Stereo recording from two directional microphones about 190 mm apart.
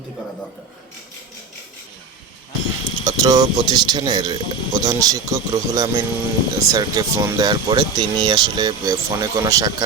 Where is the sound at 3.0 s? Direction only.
20° right (ahead or behind).